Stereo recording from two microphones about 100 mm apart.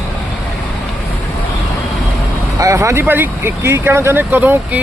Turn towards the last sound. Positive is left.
turn(degrees=-15)  # may be behind; listen again after turning